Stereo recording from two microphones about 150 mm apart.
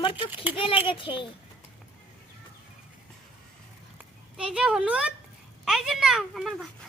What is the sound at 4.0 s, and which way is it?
A child's voice, 5° right (ahead or behind).